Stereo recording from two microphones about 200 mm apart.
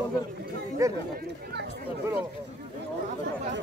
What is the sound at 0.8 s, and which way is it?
Speech, 15° right (ahead or behind).